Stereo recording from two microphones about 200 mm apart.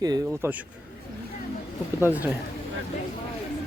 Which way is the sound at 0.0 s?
20° right (ahead or behind).